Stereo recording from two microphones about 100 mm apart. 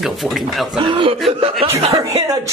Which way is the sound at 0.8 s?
60° right (ahead or behind).